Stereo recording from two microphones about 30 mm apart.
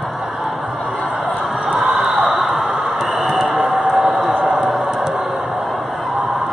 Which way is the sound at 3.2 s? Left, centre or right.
Centre.